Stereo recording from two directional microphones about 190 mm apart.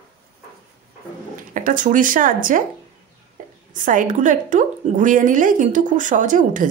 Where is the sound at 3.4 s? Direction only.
45° right (ahead or behind).